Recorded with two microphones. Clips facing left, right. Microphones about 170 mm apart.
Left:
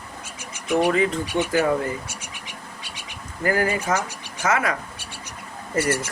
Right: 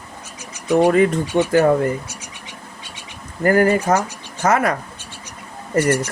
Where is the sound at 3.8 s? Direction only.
30° right (ahead or behind).